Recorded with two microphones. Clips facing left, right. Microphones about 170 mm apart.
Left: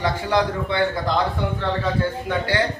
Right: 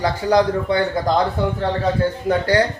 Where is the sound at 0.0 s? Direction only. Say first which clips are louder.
Right 4 dB; 40° right (ahead or behind).